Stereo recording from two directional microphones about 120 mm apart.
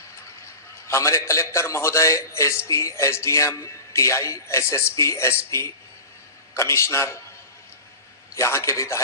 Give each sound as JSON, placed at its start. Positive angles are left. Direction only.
{"t": 0.9, "sound": "a man's voice", "side_deg": 25}
{"t": 8.4, "sound": "a man's voice", "side_deg": 20}